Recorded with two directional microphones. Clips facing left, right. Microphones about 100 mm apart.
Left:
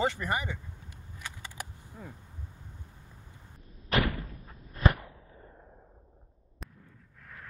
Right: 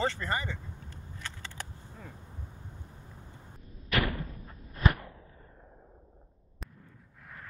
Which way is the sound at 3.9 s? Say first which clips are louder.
Left 2 dB; 30° left (ahead or behind).